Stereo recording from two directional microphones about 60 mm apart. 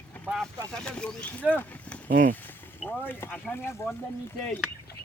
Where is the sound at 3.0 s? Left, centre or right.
Left.